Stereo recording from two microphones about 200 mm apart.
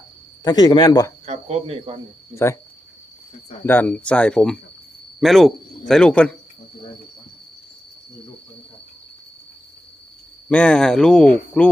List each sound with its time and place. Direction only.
0.4 s speech: 20° left (ahead or behind)
1.2 s speech: 35° right (ahead or behind)
2.3 s speech: 15° left (ahead or behind)
3.7 s speech: 5° left (ahead or behind)
10.5 s speech: 5° left (ahead or behind)